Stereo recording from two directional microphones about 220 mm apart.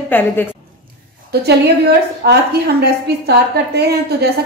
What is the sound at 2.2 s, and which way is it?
A woman's voice, 50° right (ahead or behind).